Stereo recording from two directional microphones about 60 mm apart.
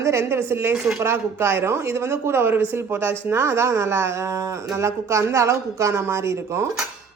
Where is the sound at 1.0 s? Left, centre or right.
Right.